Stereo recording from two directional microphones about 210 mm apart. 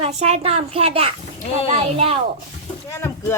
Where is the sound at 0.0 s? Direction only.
30° right (ahead or behind).